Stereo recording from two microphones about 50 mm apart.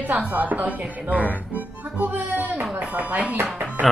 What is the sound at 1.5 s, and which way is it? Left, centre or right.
Music, right.